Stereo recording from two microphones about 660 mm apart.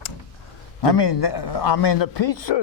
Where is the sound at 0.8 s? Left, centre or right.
Left.